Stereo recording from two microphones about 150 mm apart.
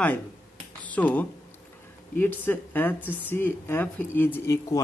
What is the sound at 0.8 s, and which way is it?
Speech, 10° left (ahead or behind).